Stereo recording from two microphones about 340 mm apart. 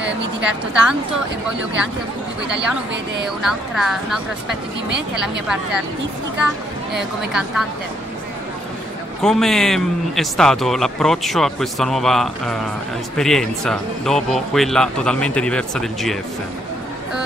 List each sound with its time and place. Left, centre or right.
0.4 s a man's voice: centre
3.7 s a man's voice: centre
4.8 s speech: right
6.4 s a man's voice: centre
9.2 s a man's voice: centre